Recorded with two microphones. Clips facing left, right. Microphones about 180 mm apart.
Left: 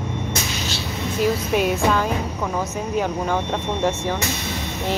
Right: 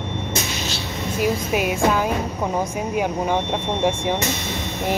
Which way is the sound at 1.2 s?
10° right (ahead or behind).